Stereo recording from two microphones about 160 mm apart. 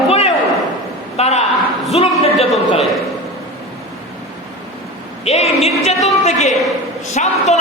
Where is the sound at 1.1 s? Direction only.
40° left (ahead or behind).